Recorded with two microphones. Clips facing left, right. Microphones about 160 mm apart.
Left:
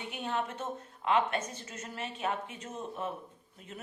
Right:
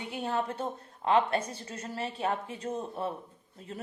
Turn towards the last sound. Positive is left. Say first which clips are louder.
# right 5 dB
turn(degrees=-35)  # may be behind; listen again after turning